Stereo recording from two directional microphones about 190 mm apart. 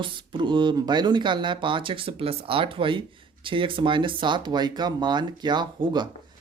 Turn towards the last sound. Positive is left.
turn(degrees=-25)  # may be behind; listen again after turning